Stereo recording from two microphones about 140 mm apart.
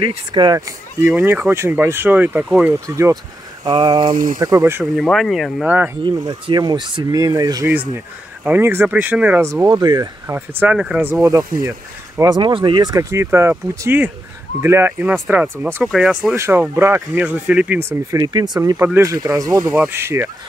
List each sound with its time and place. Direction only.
0.0 s speech: 35° right (ahead or behind)
1.1 s speech: 15° right (ahead or behind)
3.6 s boiling: 30° right (ahead or behind)
4.4 s speech: 25° right (ahead or behind)
4.9 s speech: centre (ahead or behind)
6.0 s speech: 30° right (ahead or behind)
8.5 s speech: 15° right (ahead or behind)
10.2 s speech: 15° right (ahead or behind)
16.3 s speech: 20° right (ahead or behind)
19.7 s speech: 15° right (ahead or behind)